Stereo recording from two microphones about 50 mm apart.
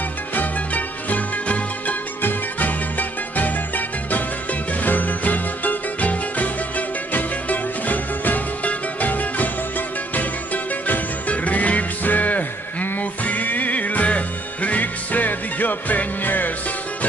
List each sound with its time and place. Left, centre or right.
0.3 s music: left